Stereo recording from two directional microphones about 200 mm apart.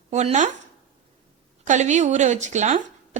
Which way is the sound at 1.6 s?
35° right (ahead or behind).